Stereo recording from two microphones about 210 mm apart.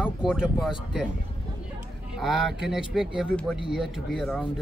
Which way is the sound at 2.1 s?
Centre (ahead or behind).